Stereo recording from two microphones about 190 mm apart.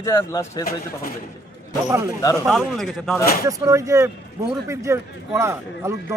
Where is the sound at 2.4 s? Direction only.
Centre (ahead or behind).